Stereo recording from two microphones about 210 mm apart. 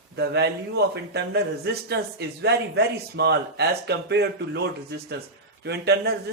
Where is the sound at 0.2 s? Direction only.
50° right (ahead or behind).